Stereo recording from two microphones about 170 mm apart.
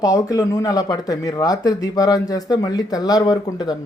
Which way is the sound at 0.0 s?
20° left (ahead or behind).